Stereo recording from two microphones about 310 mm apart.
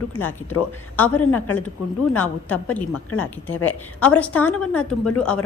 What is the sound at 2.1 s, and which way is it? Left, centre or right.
Speech, centre.